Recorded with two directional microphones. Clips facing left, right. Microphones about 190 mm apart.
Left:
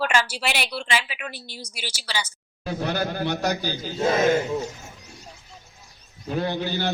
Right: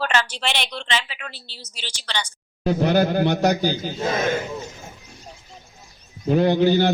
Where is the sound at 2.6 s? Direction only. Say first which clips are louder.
Right 8 dB; 50° right (ahead or behind).